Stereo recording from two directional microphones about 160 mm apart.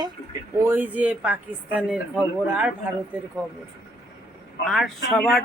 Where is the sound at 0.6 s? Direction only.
10° right (ahead or behind).